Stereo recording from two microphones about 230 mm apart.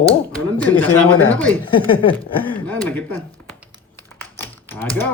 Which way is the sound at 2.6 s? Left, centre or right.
Centre.